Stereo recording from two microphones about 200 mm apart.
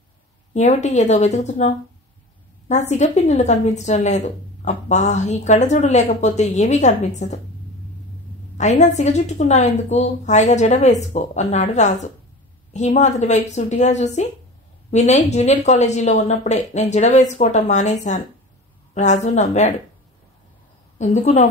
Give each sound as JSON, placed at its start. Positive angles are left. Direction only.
{"t": 0.6, "sound": "a woman's voice", "side_deg": 35}
{"t": 8.5, "sound": "a woman's voice", "side_deg": 35}
{"t": 21.0, "sound": "a woman's voice", "side_deg": 35}